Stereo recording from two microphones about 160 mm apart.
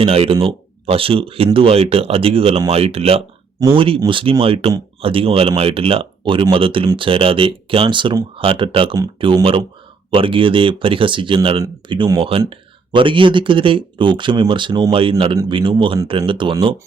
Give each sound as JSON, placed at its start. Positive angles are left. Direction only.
{"t": 0.0, "sound": "speech", "side_deg": -35}